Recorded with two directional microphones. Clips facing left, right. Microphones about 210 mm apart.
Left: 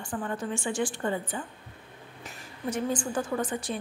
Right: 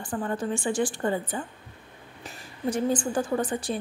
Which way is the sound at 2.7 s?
30° right (ahead or behind).